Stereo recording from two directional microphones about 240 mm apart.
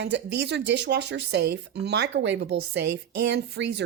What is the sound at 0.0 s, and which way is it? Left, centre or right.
Speech, right.